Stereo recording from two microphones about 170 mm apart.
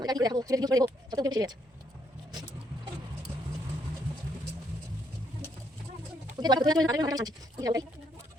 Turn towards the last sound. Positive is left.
turn(degrees=-20)  # may be behind; listen again after turning